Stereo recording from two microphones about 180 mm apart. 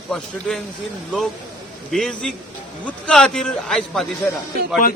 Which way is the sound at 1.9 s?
5° left (ahead or behind).